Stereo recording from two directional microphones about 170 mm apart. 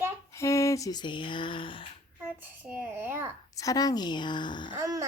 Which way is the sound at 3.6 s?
20° left (ahead or behind).